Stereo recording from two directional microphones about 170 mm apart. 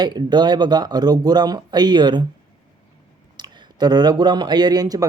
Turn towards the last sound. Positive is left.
turn(degrees=-20)  # may be behind; listen again after turning